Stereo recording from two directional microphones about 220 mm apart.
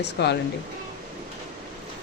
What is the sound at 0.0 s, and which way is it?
Speech, 50° left (ahead or behind).